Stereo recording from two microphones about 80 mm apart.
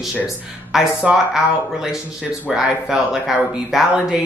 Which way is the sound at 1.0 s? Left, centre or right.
Centre.